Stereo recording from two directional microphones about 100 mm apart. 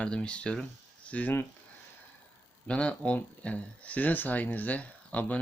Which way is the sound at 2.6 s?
10° left (ahead or behind).